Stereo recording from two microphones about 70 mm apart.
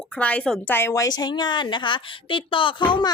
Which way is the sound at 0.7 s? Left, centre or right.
Left.